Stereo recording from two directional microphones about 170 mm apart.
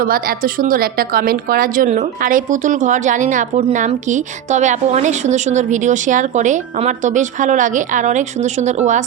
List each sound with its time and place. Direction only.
0.0 s a woman's voice: 55° right (ahead or behind)